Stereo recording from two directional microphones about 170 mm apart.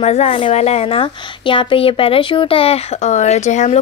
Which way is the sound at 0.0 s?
40° left (ahead or behind).